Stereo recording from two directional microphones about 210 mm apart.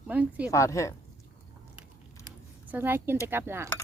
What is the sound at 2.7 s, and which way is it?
Speech, 10° right (ahead or behind).